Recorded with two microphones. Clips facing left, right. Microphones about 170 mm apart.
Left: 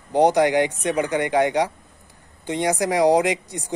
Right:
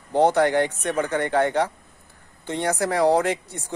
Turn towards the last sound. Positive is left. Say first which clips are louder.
# left 2 dB
turn(degrees=15)  # may be behind; listen again after turning